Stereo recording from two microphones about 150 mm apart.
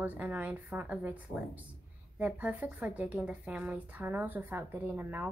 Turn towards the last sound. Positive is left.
turn(degrees=-15)  # may be behind; listen again after turning